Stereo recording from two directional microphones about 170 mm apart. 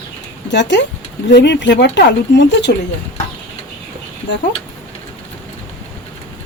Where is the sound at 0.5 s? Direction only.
90° left.